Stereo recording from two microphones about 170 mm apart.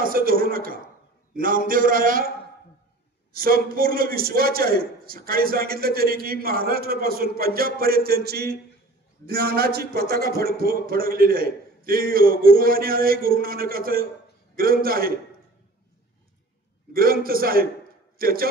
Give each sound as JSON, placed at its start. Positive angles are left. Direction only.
{"t": 0.0, "sound": "a man's voice", "side_deg": -55}
{"t": 3.3, "sound": "a man's voice", "side_deg": -60}
{"t": 16.9, "sound": "a man's voice", "side_deg": -60}